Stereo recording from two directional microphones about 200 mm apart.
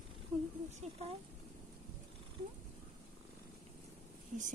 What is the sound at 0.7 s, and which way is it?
Speech, 35° right (ahead or behind).